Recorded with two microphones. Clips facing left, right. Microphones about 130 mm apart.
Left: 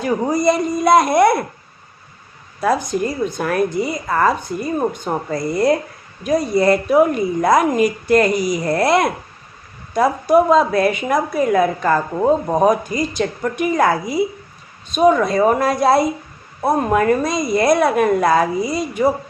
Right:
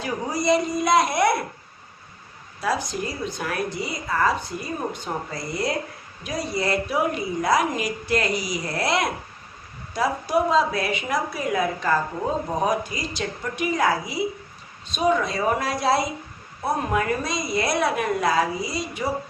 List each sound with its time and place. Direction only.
0.0 s a woman's voice: 50° left (ahead or behind)
2.6 s a woman's voice: 50° left (ahead or behind)